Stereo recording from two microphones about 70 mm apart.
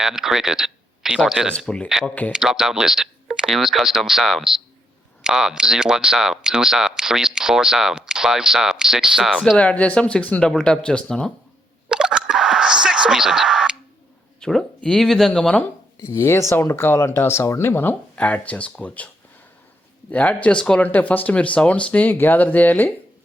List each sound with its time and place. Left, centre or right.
0.0 s speech: centre
1.5 s speech: centre
2.3 s speech: centre
9.6 s speech: left
10.4 s speech: centre
11.9 s a sound: centre
14.4 s speech: centre
16.0 s speech: left
17.7 s speech: left
18.2 s speech: left
20.1 s speech: left